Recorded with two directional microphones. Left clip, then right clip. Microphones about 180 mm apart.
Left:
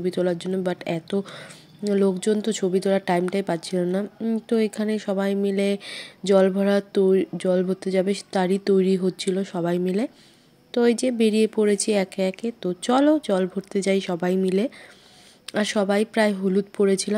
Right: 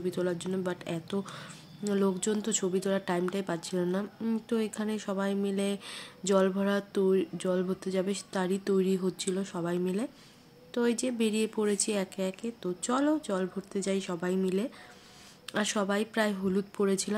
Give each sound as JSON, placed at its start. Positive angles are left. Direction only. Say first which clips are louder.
{"t": 0.0, "sound": "speech", "louder": "left 8 dB", "side_deg": 30}